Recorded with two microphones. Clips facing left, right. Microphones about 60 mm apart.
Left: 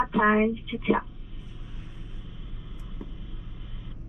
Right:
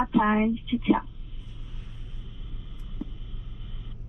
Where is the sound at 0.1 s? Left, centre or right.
Centre.